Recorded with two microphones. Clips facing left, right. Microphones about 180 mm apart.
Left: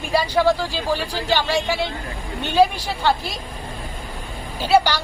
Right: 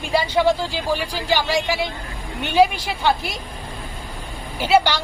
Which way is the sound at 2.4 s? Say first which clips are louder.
Even; 15° right (ahead or behind).